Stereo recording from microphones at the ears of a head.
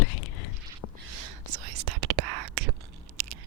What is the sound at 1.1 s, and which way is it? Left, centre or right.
Whispering, right.